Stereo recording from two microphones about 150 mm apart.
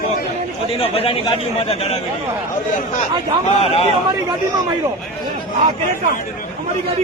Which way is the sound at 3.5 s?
40° left (ahead or behind).